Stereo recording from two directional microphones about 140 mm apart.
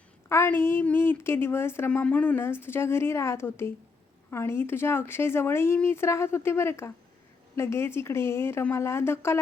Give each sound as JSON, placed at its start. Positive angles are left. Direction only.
{"t": 0.3, "sound": "speech", "side_deg": 15}